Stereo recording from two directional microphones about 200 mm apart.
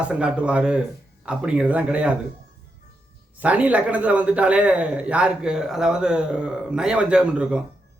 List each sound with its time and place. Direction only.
0.0 s a man's voice: 5° right (ahead or behind)
3.3 s a man's voice: 5° right (ahead or behind)